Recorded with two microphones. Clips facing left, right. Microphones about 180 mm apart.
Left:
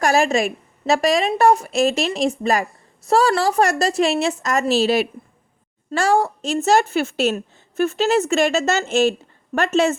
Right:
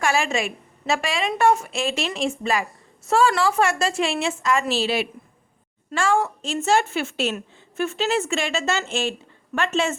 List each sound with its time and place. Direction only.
0.0 s a woman's voice: 40° left (ahead or behind)